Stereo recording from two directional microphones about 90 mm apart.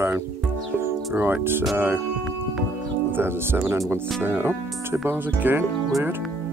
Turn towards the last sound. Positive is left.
turn(degrees=-25)  # may be behind; listen again after turning